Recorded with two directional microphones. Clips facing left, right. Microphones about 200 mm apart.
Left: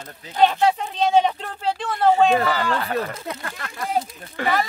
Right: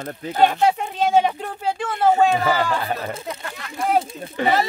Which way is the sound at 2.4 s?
20° right (ahead or behind).